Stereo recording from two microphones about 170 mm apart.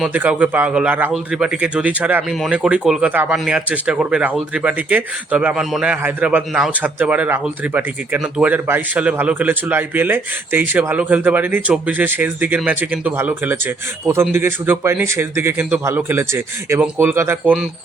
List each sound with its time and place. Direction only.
0.0 s speech: 10° right (ahead or behind)